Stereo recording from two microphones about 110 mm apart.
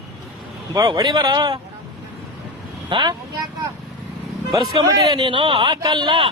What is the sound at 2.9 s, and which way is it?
A man's voice, 45° right (ahead or behind).